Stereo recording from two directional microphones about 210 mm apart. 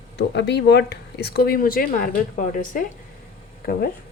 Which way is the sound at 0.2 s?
55° left (ahead or behind).